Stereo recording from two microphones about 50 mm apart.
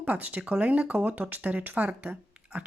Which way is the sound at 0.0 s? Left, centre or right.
Right.